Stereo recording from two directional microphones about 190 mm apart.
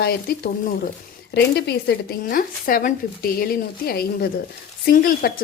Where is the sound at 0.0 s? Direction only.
55° left (ahead or behind).